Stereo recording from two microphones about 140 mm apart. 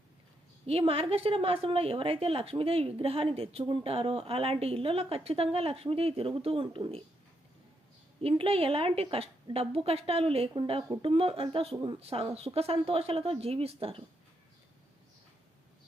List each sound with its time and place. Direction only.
0.6 s a woman's voice: 45° right (ahead or behind)
8.2 s a woman's voice: 45° right (ahead or behind)